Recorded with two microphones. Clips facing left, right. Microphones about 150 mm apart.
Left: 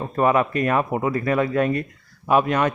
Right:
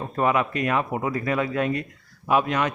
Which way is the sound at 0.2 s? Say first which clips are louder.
Left 4 dB; 45° left (ahead or behind).